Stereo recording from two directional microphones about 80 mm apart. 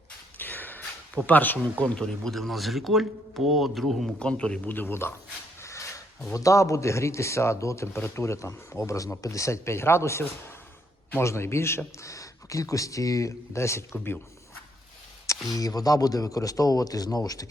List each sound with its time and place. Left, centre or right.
0.3 s a sound: left
1.8 s a man's voice: centre
4.2 s a man's voice: centre
4.7 s speech: left
15.5 s speech: left